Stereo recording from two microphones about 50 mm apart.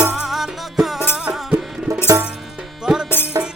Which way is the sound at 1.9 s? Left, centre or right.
Right.